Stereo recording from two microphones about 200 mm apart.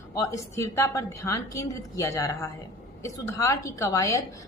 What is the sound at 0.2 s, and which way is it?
Speech, 15° left (ahead or behind).